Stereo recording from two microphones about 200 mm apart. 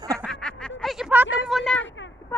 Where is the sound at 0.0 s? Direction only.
15° right (ahead or behind).